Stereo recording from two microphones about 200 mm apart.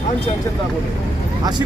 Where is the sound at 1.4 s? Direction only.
20° right (ahead or behind).